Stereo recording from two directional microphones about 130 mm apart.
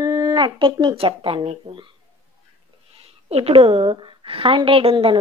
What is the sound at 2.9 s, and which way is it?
A woman's voice, 50° right (ahead or behind).